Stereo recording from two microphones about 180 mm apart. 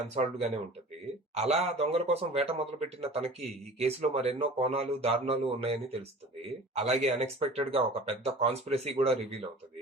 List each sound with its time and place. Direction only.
0.0 s speech: 35° right (ahead or behind)